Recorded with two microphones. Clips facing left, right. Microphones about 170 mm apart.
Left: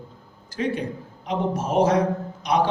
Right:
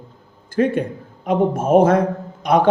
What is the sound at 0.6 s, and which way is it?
A man's voice, 50° right (ahead or behind).